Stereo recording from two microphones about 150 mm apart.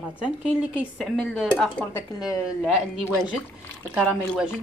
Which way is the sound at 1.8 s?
15° left (ahead or behind).